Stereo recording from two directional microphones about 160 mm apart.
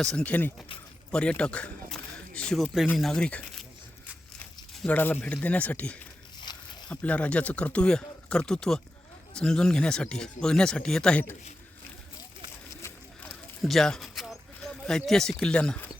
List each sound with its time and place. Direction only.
0.0 s speech: 5° left (ahead or behind)
4.8 s speech: 10° left (ahead or behind)
6.4 s a sound: 25° left (ahead or behind)
6.9 s speech: 10° left (ahead or behind)
13.6 s speech: centre (ahead or behind)